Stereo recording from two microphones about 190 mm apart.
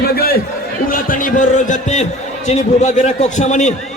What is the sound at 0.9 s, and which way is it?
A man's voice, 45° left (ahead or behind).